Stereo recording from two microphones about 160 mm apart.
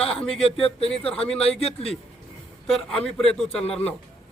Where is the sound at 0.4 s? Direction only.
35° left (ahead or behind).